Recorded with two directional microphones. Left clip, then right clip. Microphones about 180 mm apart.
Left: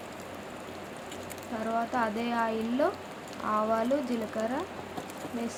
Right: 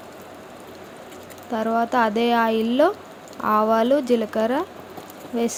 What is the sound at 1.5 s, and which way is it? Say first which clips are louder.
Speech: right 10 dB; 50° right (ahead or behind).